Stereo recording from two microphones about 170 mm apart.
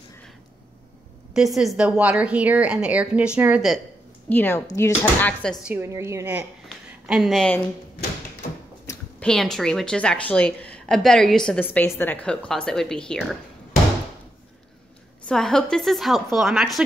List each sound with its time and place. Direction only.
1.3 s a woman's voice: centre (ahead or behind)
4.3 s speech: 10° left (ahead or behind)
5.6 s a woman's voice: 10° right (ahead or behind)
7.1 s a woman's voice: centre (ahead or behind)
9.2 s a woman's voice: 5° left (ahead or behind)
15.2 s a woman's voice: 5° left (ahead or behind)